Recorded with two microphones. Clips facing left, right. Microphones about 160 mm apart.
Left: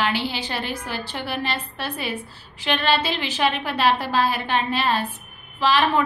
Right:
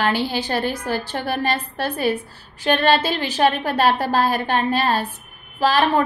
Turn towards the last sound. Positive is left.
turn(degrees=-40)  # may be behind; listen again after turning